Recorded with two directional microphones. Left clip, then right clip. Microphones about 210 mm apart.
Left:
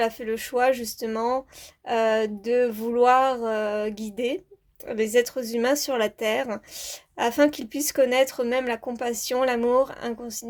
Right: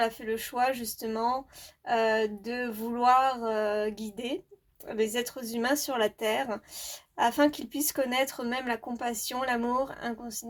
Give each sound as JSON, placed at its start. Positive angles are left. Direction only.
{"t": 0.2, "sound": "speech", "side_deg": 40}